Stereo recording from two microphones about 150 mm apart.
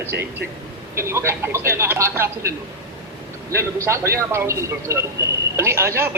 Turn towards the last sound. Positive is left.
turn(degrees=-15)  # may be behind; listen again after turning